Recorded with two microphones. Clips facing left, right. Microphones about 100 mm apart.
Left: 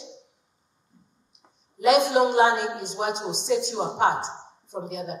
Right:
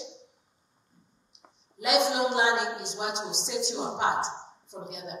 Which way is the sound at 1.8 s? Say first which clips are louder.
Left 6 dB; 45° left (ahead or behind).